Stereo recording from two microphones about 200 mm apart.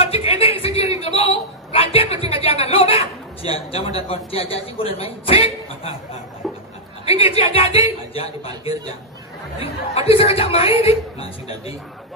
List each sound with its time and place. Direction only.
0.0 s a sound: 30° left (ahead or behind)
1.7 s a woman's voice: 30° left (ahead or behind)
6.4 s a sound: centre (ahead or behind)
7.1 s speech: 30° left (ahead or behind)
8.5 s a man's voice: 20° right (ahead or behind)
9.6 s speech: 30° left (ahead or behind)